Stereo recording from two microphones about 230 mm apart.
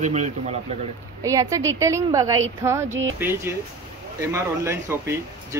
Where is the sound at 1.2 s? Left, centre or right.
Centre.